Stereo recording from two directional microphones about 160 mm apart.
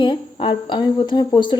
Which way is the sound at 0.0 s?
30° left (ahead or behind).